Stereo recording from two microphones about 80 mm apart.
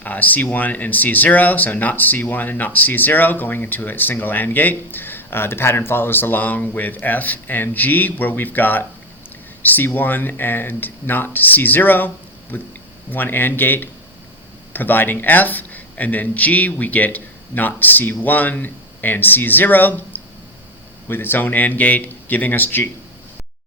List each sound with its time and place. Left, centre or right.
0.0 s speech: left